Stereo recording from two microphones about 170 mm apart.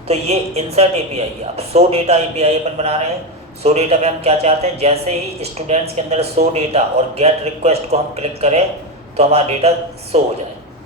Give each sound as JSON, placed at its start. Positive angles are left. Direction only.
{"t": 0.1, "sound": "speech", "side_deg": -35}